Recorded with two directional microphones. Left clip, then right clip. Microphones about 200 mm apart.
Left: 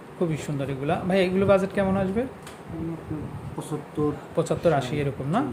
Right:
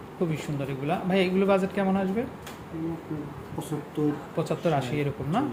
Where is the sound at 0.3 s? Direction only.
20° left (ahead or behind).